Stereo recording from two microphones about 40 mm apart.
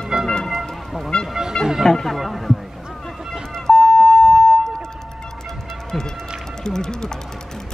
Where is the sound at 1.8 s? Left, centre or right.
Centre.